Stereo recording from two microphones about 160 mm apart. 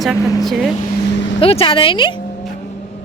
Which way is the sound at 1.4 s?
35° left (ahead or behind).